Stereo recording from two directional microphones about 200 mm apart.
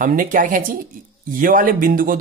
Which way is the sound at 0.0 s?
45° right (ahead or behind).